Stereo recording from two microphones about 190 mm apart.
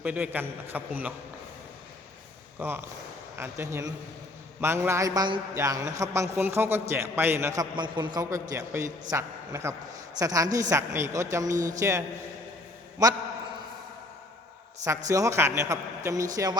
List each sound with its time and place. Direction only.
0.0 s a man's voice: 10° right (ahead or behind)
2.6 s a man's voice: 10° right (ahead or behind)
11.5 s a man's voice: 40° right (ahead or behind)
11.8 s a man's voice: 15° right (ahead or behind)
14.8 s a man's voice: 15° right (ahead or behind)